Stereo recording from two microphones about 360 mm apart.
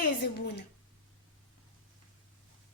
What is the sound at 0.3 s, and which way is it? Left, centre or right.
Babbling, left.